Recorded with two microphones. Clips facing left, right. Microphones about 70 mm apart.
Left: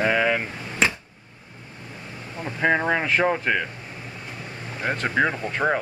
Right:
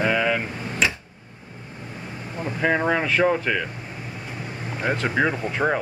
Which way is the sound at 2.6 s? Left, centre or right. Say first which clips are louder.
Even; centre.